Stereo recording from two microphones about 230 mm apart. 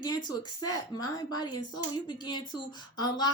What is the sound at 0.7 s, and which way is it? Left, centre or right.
A woman's voice, centre.